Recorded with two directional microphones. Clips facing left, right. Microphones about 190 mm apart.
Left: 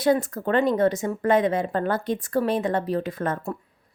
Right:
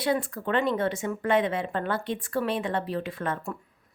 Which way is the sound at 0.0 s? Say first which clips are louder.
Left 5 dB; 45° left (ahead or behind).